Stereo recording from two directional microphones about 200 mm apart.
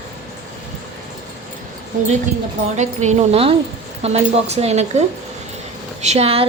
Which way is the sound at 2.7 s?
35° right (ahead or behind).